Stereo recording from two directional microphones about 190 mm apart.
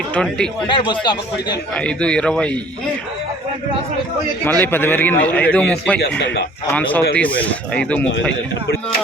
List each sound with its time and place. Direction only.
0.1 s speech: 5° left (ahead or behind)
0.7 s speech: 25° left (ahead or behind)
1.7 s speech: 5° left (ahead or behind)
4.4 s a man's voice: 10° left (ahead or behind)
6.0 s speech: 60° left (ahead or behind)
7.2 s a man's voice: 5° left (ahead or behind)